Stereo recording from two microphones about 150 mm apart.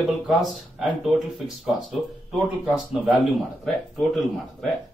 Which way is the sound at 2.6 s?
Centre (ahead or behind).